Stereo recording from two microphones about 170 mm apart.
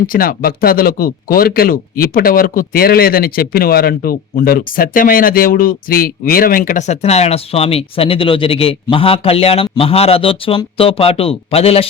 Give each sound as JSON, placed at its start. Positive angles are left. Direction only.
{"t": 0.1, "sound": "speech", "side_deg": 60}